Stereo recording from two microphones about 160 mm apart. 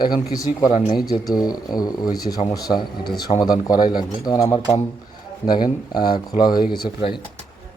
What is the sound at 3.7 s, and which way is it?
Speech, 60° left (ahead or behind).